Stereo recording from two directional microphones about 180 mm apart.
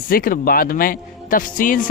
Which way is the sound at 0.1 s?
50° left (ahead or behind).